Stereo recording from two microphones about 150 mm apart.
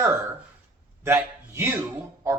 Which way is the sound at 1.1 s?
15° right (ahead or behind).